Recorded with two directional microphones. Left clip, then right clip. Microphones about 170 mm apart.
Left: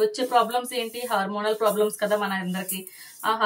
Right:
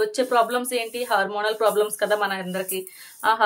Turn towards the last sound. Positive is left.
turn(degrees=-50)  # may be behind; listen again after turning